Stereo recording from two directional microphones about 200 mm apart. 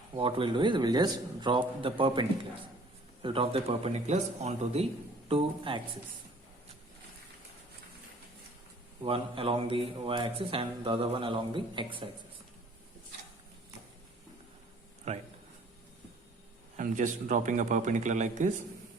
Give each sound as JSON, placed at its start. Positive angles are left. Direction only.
{"t": 0.2, "sound": "speech", "side_deg": -25}
{"t": 9.0, "sound": "speech", "side_deg": -25}
{"t": 15.1, "sound": "a sound", "side_deg": -35}
{"t": 16.7, "sound": "speech", "side_deg": -40}